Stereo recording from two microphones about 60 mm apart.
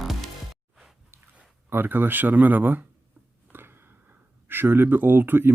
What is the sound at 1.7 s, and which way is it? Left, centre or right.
Speech, right.